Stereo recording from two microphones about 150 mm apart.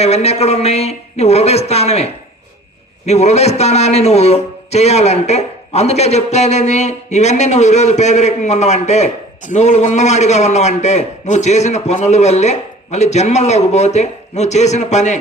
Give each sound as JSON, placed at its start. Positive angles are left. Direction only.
{"t": 0.0, "sound": "a man's voice", "side_deg": 45}